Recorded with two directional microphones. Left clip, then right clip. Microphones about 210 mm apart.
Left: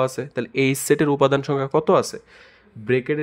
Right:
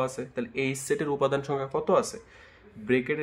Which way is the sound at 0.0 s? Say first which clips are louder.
Left 7 dB; 45° left (ahead or behind).